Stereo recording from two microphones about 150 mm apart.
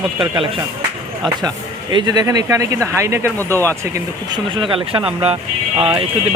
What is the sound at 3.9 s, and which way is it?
Speech, 30° right (ahead or behind).